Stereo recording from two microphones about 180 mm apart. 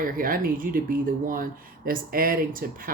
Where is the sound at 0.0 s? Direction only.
50° right (ahead or behind).